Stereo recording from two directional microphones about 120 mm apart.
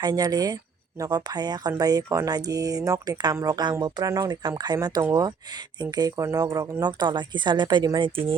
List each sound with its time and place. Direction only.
0.0 s speech: 35° right (ahead or behind)